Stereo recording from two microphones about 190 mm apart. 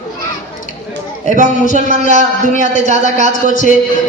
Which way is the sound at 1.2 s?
40° right (ahead or behind).